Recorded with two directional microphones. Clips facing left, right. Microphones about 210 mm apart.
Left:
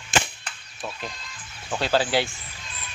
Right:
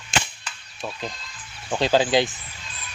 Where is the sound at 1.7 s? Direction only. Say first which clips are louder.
Right 3 dB; 15° right (ahead or behind).